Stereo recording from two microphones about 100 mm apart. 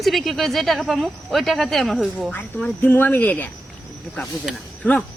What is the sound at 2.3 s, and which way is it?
Speech, 15° left (ahead or behind).